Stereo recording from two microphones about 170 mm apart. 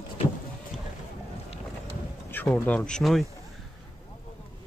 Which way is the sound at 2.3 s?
10° left (ahead or behind).